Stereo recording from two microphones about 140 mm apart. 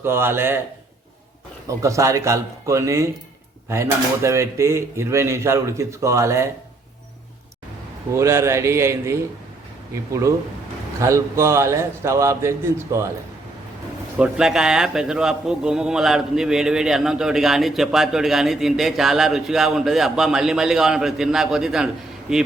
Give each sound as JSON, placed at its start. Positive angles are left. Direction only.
{"t": 0.0, "sound": "speech", "side_deg": -15}
{"t": 1.8, "sound": "speech", "side_deg": -20}
{"t": 8.1, "sound": "speech", "side_deg": -20}
{"t": 14.2, "sound": "a man's voice", "side_deg": -5}